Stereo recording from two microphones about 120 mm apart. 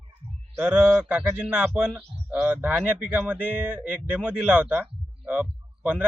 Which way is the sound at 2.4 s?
15° right (ahead or behind).